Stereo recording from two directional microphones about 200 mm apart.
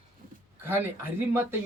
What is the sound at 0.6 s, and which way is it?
Speech, 10° right (ahead or behind).